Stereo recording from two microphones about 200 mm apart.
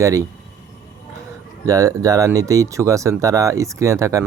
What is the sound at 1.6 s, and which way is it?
Speech, 15° right (ahead or behind).